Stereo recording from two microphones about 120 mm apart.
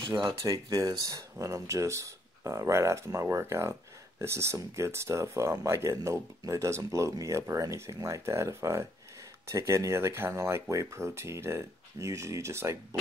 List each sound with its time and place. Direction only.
0.0 s speech: 40° right (ahead or behind)
0.4 s speech: 30° right (ahead or behind)